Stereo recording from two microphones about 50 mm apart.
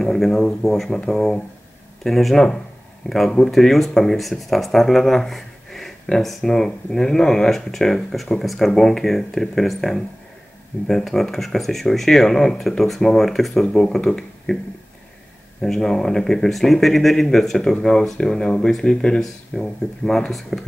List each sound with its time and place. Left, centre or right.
0.0 s speech: centre
15.6 s speech: centre